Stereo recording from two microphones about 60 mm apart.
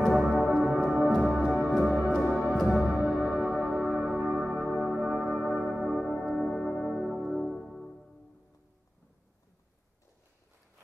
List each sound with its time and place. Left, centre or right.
0.5 s music: centre
5.5 s music: centre
5.9 s music: centre